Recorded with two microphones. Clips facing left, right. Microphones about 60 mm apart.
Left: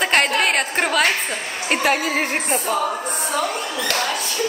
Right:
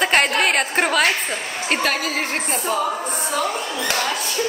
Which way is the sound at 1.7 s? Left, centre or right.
Centre.